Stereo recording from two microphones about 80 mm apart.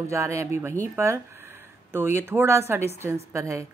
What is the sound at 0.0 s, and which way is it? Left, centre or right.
Speech, right.